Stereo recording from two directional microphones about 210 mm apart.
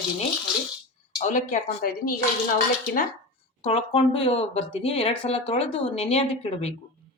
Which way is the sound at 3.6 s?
30° left (ahead or behind).